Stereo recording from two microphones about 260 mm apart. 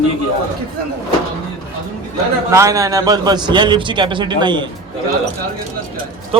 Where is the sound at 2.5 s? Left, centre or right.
Centre.